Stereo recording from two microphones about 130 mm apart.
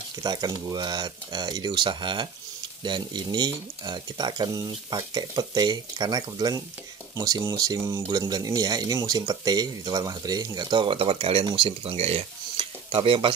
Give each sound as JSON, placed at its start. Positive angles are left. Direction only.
{"t": 0.2, "sound": "speech", "side_deg": -30}